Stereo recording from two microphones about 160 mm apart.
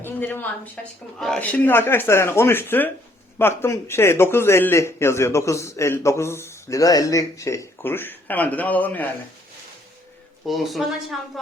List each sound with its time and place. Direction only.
0.0 s a woman's voice: 10° left (ahead or behind)
10.4 s speech: centre (ahead or behind)